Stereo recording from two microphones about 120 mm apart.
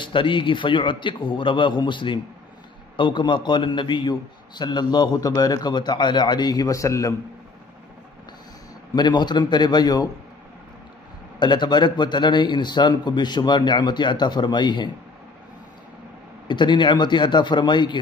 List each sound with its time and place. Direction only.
0.0 s a man's voice: 45° left (ahead or behind); by 7.2 s 25° left (ahead or behind)
8.9 s a man's voice: 35° left (ahead or behind)
11.3 s a man's voice: 40° left (ahead or behind)
16.4 s a man's voice: 40° left (ahead or behind)